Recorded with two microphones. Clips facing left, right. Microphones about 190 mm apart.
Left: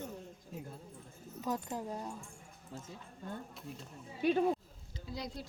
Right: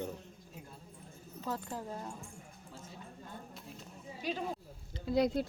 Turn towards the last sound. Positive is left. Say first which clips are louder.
# right 13 dB
turn(degrees=-60)  # may be behind; listen again after turning